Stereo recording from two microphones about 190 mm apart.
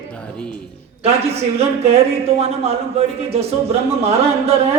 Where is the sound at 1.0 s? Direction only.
35° right (ahead or behind).